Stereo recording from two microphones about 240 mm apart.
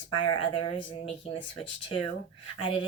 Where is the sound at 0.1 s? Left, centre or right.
Left.